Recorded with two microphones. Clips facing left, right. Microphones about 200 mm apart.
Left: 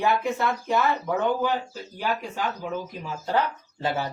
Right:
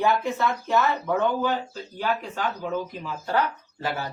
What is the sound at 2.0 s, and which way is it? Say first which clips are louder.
Speech: right 1 dB; 10° left (ahead or behind).